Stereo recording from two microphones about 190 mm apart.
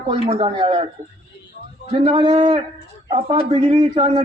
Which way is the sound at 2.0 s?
30° right (ahead or behind).